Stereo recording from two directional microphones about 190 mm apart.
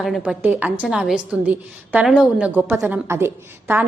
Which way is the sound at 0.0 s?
Centre (ahead or behind).